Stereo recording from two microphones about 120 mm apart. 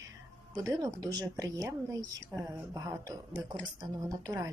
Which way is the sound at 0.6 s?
30° right (ahead or behind).